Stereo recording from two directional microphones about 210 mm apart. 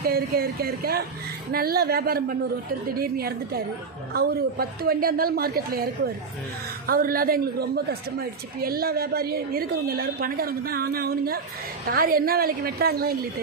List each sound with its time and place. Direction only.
0.0 s a woman's voice: 45° right (ahead or behind)